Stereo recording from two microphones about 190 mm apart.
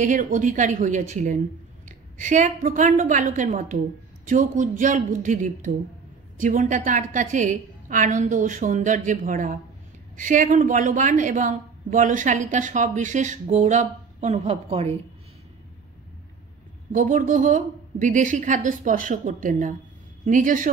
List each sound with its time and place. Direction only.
0.0 s a woman's voice: 40° right (ahead or behind)
16.9 s a woman's voice: 45° right (ahead or behind)